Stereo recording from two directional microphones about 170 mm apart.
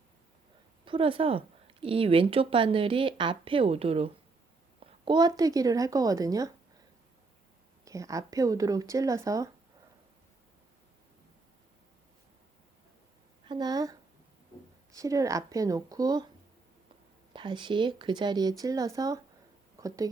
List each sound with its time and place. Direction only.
0.9 s a woman's voice: 30° right (ahead or behind)
7.9 s speech: 20° right (ahead or behind)
13.4 s speech: 25° right (ahead or behind)
14.9 s speech: 20° right (ahead or behind)
17.3 s speech: 30° right (ahead or behind)
19.8 s a sound: 20° right (ahead or behind)